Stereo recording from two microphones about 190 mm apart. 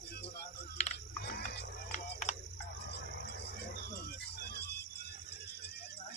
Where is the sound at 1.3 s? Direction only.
55° left (ahead or behind).